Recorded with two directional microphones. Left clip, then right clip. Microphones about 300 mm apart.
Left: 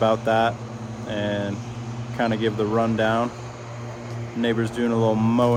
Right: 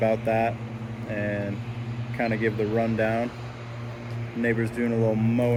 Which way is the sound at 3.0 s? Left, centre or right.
Centre.